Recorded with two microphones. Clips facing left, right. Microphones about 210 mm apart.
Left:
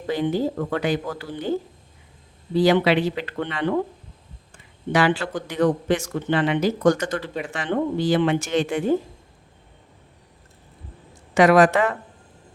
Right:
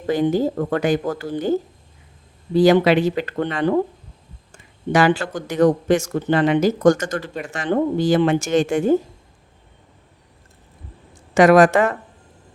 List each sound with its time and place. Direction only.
0.1 s speech: 45° right (ahead or behind)
2.6 s speech: 45° right (ahead or behind)
11.3 s speech: 45° right (ahead or behind)